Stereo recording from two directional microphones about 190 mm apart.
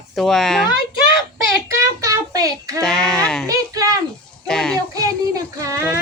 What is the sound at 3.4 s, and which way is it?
Speech, 20° right (ahead or behind).